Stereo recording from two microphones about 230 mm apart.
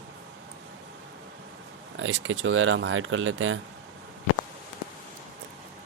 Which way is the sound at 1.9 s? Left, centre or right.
Right.